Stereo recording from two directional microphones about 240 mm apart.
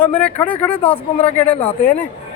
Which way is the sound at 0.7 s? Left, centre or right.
Left.